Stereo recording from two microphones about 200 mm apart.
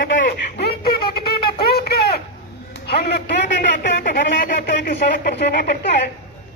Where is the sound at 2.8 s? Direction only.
55° left (ahead or behind).